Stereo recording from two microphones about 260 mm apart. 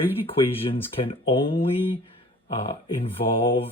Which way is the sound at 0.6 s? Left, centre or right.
Left.